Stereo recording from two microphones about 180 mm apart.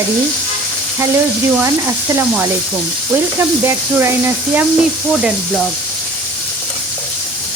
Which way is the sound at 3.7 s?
15° right (ahead or behind).